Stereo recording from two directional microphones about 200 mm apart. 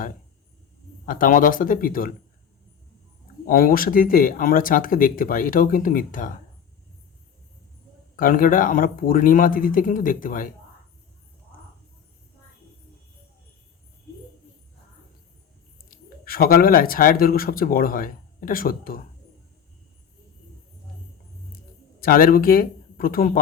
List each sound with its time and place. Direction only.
1.0 s speech: 40° left (ahead or behind)
3.4 s speech: 45° left (ahead or behind)
8.1 s speech: 45° left (ahead or behind)
15.9 s speech: 50° left (ahead or behind)
22.0 s speech: 45° left (ahead or behind)